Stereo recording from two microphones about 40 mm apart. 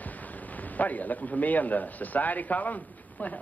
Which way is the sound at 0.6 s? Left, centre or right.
Left.